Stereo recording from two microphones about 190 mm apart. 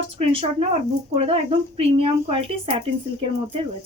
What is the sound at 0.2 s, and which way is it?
Speech, 30° right (ahead or behind).